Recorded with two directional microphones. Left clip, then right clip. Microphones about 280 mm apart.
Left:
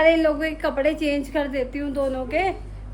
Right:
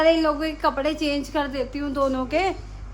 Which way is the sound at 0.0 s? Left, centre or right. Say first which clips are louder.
Left 1 dB; centre.